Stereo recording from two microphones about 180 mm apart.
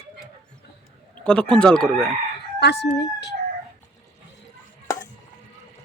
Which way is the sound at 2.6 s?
70° left (ahead or behind).